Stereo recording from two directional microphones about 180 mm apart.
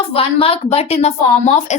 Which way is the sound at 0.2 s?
30° left (ahead or behind).